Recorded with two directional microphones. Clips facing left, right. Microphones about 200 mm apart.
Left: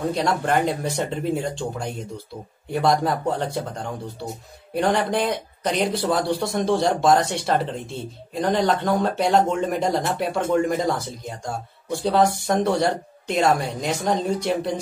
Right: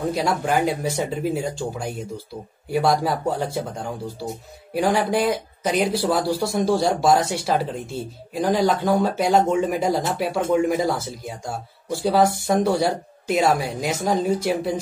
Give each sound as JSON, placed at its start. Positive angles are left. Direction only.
{"t": 0.1, "sound": "speech", "side_deg": -5}